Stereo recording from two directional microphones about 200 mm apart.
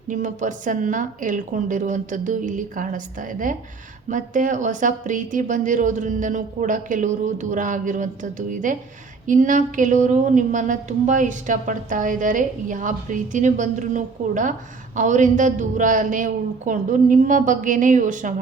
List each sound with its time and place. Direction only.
0.1 s a woman's voice: 40° right (ahead or behind)